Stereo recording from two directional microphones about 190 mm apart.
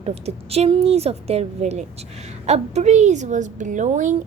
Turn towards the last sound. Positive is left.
turn(degrees=-40)  # may be behind; listen again after turning